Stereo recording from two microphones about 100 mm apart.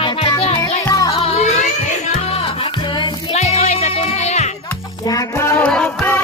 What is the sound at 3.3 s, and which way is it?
Music, 90° left.